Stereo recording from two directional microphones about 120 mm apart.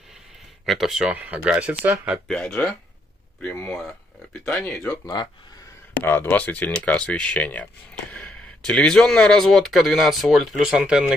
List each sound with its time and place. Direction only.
0.7 s speech: centre (ahead or behind)
2.2 s speech: 5° left (ahead or behind)
5.0 s speech: 35° left (ahead or behind)
5.9 s speech: 15° left (ahead or behind); by 11.1 s 5° right (ahead or behind)